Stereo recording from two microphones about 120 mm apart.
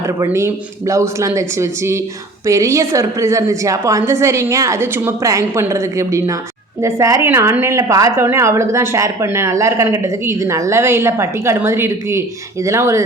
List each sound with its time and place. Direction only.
0.2 s a woman's voice: 25° right (ahead or behind)